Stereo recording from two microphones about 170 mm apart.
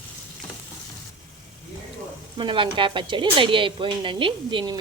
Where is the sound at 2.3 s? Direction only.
30° right (ahead or behind).